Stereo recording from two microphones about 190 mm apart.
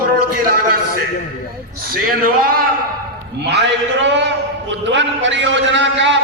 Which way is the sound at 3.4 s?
60° right (ahead or behind).